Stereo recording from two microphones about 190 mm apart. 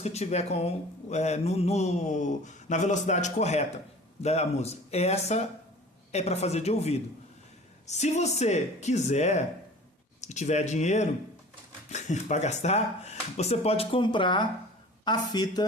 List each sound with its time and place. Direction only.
0.0 s speech: 35° left (ahead or behind)